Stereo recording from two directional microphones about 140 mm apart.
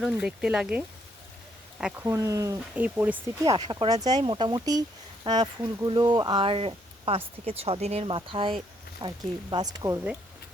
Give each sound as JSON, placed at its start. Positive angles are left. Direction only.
{"t": 0.0, "sound": "speech", "side_deg": -5}
{"t": 2.0, "sound": "speech", "side_deg": -25}
{"t": 2.7, "sound": "speech", "side_deg": -10}
{"t": 3.4, "sound": "speech", "side_deg": -30}